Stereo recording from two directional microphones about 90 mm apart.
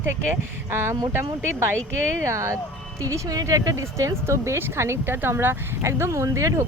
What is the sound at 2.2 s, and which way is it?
A woman's voice, 35° right (ahead or behind).